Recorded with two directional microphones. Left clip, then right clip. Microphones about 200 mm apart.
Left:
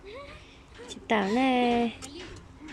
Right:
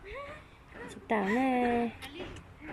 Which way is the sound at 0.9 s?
5° right (ahead or behind).